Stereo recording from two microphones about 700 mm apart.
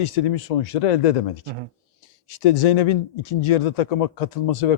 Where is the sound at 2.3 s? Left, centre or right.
Left.